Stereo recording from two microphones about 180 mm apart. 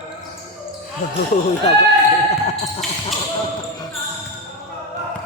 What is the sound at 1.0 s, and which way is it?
Speech, 45° left (ahead or behind).